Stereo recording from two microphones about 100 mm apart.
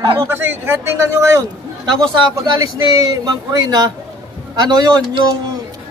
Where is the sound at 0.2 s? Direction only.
25° right (ahead or behind).